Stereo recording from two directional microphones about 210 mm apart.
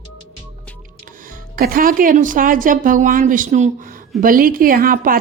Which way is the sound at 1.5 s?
40° right (ahead or behind).